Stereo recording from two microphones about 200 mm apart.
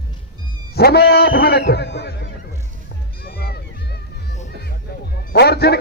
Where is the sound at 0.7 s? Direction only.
50° left (ahead or behind).